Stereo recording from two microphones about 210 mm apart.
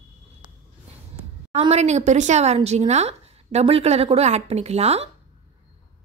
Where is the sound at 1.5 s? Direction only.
30° right (ahead or behind).